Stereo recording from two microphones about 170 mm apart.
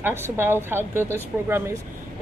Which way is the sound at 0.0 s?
15° right (ahead or behind).